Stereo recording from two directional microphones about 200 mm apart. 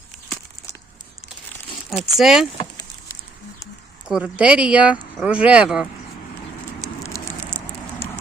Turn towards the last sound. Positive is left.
turn(degrees=10)  # may be behind; listen again after turning